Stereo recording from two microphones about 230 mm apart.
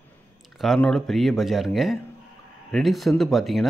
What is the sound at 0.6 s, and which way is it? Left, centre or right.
Speech, centre.